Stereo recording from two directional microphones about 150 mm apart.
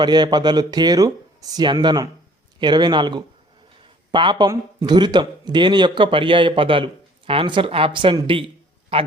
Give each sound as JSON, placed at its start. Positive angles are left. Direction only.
{"t": 0.0, "sound": "a man's voice", "side_deg": -30}